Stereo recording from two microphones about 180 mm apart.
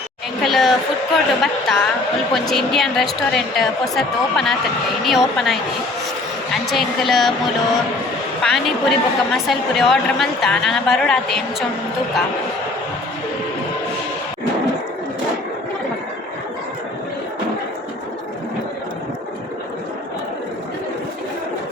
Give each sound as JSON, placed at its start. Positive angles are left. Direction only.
{"t": 0.4, "sound": "a woman's voice", "side_deg": 0}
{"t": 8.4, "sound": "a woman's voice", "side_deg": 0}